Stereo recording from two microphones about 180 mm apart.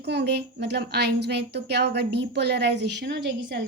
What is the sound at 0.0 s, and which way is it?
A woman's voice, 70° right (ahead or behind).